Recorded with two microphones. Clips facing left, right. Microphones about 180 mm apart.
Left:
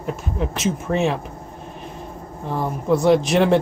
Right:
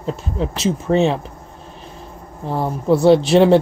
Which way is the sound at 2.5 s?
30° right (ahead or behind).